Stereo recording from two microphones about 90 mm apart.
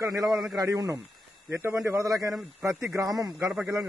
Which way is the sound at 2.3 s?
10° right (ahead or behind).